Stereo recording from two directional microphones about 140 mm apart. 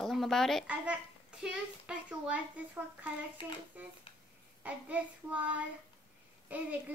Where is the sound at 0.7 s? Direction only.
10° right (ahead or behind).